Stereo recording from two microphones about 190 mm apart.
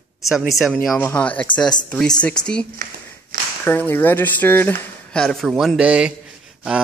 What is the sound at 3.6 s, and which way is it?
Speech, 10° left (ahead or behind).